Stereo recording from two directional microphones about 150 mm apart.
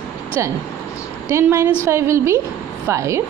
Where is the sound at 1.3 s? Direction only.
20° right (ahead or behind).